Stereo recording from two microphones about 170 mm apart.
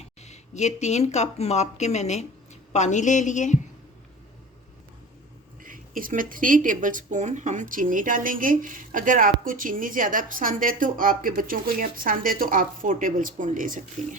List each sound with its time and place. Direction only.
0.0 s speech: 40° left (ahead or behind)
5.6 s speech: 55° right (ahead or behind)